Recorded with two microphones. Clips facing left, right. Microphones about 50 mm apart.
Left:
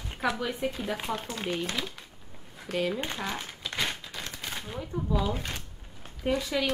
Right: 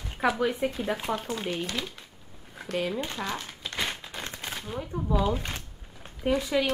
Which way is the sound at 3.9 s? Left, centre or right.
Right.